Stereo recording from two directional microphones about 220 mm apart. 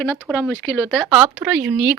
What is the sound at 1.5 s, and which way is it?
Speech, 5° right (ahead or behind).